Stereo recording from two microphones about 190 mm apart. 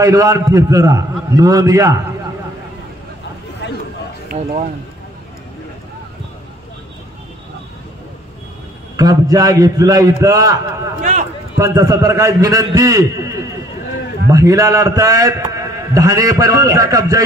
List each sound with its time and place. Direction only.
0.0 s a man's voice: 15° right (ahead or behind)
3.6 s a sound: 70° left (ahead or behind)
4.3 s speech: 50° right (ahead or behind)
8.9 s a man's voice: 20° right (ahead or behind)
11.0 s a man's voice: 45° right (ahead or behind)
11.5 s a man's voice: 15° right (ahead or behind)